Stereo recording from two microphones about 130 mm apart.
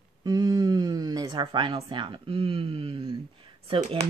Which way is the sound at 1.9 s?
40° right (ahead or behind).